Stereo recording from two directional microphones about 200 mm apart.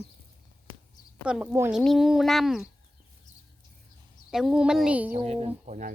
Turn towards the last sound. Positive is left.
turn(degrees=-35)  # may be behind; listen again after turning